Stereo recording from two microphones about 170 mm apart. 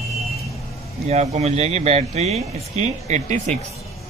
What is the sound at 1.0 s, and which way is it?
Speech, 40° right (ahead or behind).